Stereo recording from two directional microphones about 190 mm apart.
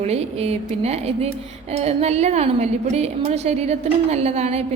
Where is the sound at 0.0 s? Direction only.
35° right (ahead or behind).